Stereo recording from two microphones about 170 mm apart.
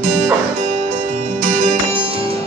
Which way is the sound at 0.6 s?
40° right (ahead or behind).